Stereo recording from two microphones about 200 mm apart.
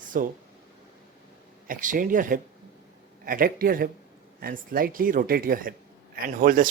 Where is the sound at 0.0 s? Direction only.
40° right (ahead or behind).